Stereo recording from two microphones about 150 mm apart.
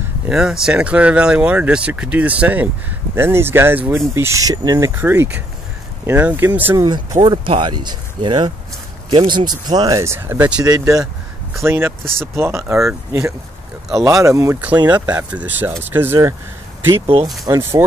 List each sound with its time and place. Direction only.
0.3 s speech: 5° right (ahead or behind)
6.8 s speech: 25° right (ahead or behind)
10.6 s speech: 25° right (ahead or behind)
17.0 s speech: 40° right (ahead or behind)
17.5 s speech: 20° right (ahead or behind)